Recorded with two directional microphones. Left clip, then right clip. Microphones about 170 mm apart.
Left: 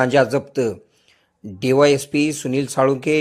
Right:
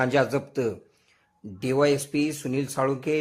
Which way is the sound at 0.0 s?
20° left (ahead or behind).